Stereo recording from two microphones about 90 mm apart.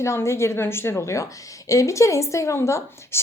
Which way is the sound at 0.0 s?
30° left (ahead or behind).